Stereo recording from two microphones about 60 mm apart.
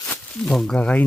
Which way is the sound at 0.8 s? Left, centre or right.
Left.